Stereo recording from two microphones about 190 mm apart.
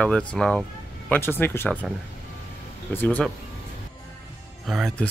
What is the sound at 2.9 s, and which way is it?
Speech, 5° left (ahead or behind).